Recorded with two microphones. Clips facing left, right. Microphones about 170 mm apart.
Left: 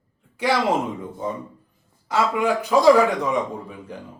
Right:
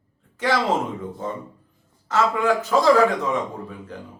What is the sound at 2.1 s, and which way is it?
A man's voice, 15° left (ahead or behind).